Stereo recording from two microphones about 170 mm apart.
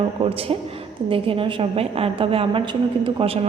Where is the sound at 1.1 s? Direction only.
30° right (ahead or behind).